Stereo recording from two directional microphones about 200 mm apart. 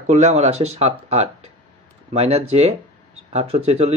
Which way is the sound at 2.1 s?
30° right (ahead or behind).